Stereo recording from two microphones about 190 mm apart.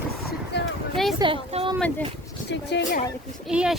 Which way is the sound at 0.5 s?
60° left (ahead or behind).